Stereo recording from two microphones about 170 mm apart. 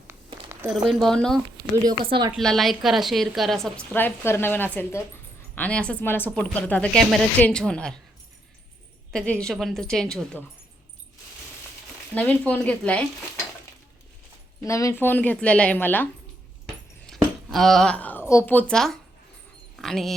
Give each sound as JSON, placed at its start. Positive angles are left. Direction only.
{"t": 0.7, "sound": "a woman's voice", "side_deg": 0}
{"t": 1.7, "sound": "speech", "side_deg": -25}
{"t": 2.4, "sound": "a woman's voice", "side_deg": 0}
{"t": 9.1, "sound": "a woman's voice", "side_deg": 5}
{"t": 12.1, "sound": "speech", "side_deg": 10}
{"t": 14.6, "sound": "speech", "side_deg": 20}
{"t": 17.5, "sound": "a woman's voice", "side_deg": 0}